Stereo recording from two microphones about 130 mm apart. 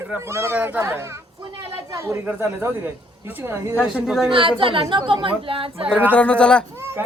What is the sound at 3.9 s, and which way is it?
Speech, 5° right (ahead or behind).